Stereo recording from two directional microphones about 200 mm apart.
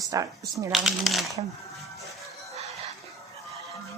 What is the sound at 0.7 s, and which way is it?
Speech, centre (ahead or behind).